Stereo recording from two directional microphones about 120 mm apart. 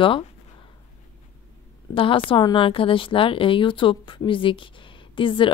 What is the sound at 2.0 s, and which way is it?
A woman's voice, 45° left (ahead or behind).